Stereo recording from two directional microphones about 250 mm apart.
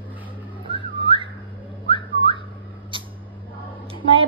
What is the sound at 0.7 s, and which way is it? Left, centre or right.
Whistling, centre.